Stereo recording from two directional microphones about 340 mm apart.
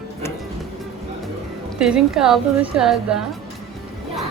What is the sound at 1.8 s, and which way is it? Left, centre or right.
A woman's voice, centre.